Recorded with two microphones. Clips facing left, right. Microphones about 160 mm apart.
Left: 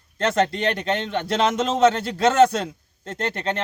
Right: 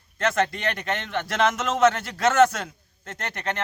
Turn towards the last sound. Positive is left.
turn(degrees=30)  # may be behind; listen again after turning